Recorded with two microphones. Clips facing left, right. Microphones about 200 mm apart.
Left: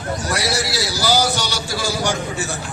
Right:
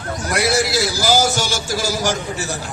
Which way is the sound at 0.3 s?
50° right (ahead or behind).